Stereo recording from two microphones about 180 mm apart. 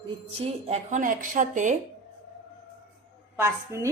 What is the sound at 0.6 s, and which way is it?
Speech, 40° right (ahead or behind).